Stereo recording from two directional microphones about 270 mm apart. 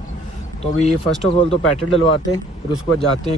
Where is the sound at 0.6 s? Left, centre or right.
Left.